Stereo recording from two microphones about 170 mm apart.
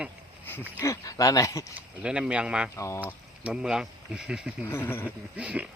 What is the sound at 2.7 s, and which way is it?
Speech, 15° left (ahead or behind).